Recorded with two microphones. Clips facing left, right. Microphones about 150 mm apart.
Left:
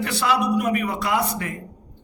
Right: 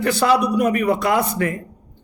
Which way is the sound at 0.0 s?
40° right (ahead or behind).